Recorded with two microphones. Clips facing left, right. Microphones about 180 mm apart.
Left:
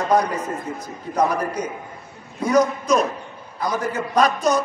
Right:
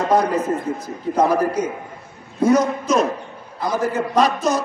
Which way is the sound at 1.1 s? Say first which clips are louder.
Right 3 dB; 25° right (ahead or behind).